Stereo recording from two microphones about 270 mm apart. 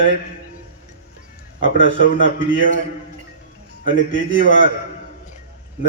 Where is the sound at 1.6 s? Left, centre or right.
Right.